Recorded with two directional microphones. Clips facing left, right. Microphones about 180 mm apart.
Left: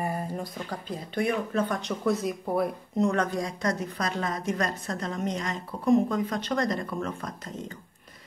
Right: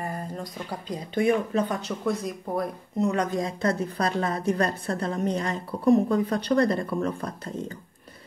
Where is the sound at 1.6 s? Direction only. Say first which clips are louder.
Even; 5° right (ahead or behind).